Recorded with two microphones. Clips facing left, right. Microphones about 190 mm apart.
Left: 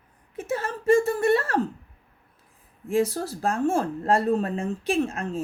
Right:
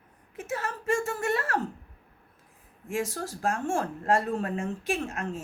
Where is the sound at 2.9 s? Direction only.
35° left (ahead or behind).